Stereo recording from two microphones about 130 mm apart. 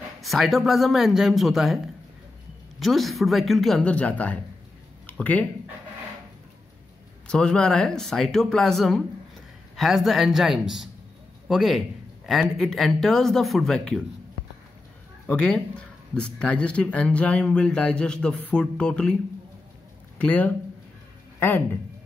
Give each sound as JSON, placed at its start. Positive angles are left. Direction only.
{"t": 0.2, "sound": "speech", "side_deg": 0}
{"t": 2.8, "sound": "speech", "side_deg": 0}
{"t": 7.2, "sound": "speech", "side_deg": 5}
{"t": 15.2, "sound": "speech", "side_deg": 10}
{"t": 20.2, "sound": "speech", "side_deg": 10}